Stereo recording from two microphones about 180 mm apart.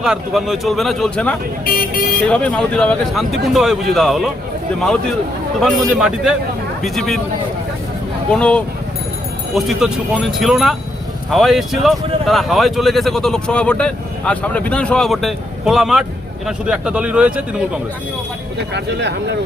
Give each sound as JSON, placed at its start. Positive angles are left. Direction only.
{"t": 0.0, "sound": "speech", "side_deg": 0}
{"t": 5.5, "sound": "speech", "side_deg": 0}
{"t": 8.3, "sound": "a man's voice", "side_deg": 5}
{"t": 18.7, "sound": "speech", "side_deg": -70}